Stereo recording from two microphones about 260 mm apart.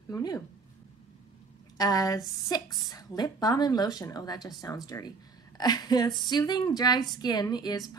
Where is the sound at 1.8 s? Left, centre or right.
Centre.